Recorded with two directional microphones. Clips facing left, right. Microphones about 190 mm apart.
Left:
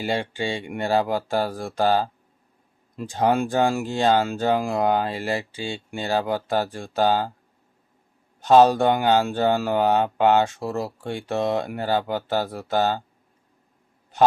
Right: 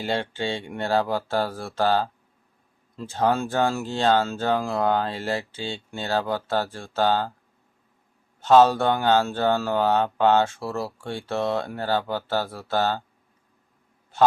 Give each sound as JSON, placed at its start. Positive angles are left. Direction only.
{"t": 0.0, "sound": "speech", "side_deg": 10}
{"t": 8.4, "sound": "speech", "side_deg": 15}
{"t": 14.1, "sound": "a man's voice", "side_deg": 15}